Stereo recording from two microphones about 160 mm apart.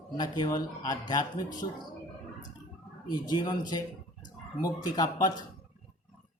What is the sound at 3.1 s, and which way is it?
Speech, 25° left (ahead or behind).